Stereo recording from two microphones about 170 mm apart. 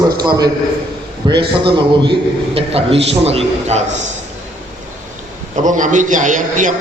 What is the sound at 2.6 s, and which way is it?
A man's voice, 35° right (ahead or behind).